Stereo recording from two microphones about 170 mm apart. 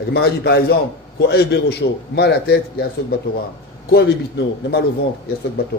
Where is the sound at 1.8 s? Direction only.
80° left.